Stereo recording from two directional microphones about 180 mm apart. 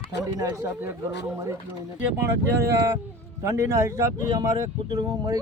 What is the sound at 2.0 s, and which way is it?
Speech, 10° right (ahead or behind).